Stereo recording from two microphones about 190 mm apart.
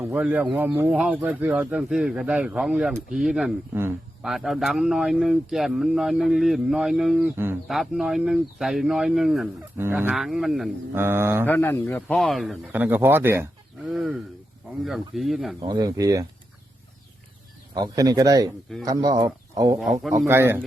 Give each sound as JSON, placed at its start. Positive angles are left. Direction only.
{"t": 0.0, "sound": "speech", "side_deg": -10}
{"t": 10.9, "sound": "speech", "side_deg": -15}
{"t": 11.4, "sound": "a man's voice", "side_deg": 10}
{"t": 13.8, "sound": "speech", "side_deg": 0}
{"t": 15.6, "sound": "speech", "side_deg": -20}
{"t": 17.7, "sound": "speech", "side_deg": -20}
{"t": 19.8, "sound": "speech", "side_deg": 0}
{"t": 20.1, "sound": "speech", "side_deg": -15}